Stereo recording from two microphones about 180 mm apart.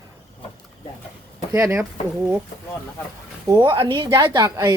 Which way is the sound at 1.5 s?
15° right (ahead or behind).